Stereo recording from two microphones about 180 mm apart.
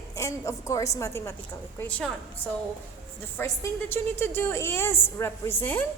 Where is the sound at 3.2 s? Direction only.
10° left (ahead or behind).